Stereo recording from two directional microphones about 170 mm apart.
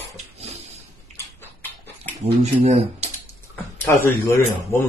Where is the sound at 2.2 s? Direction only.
40° right (ahead or behind).